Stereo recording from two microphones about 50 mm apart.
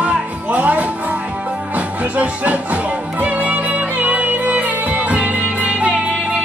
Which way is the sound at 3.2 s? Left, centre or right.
Right.